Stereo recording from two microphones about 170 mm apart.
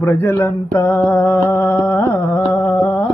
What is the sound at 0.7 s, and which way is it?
Music, 15° left (ahead or behind).